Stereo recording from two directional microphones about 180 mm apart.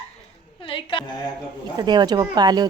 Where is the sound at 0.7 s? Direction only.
30° left (ahead or behind).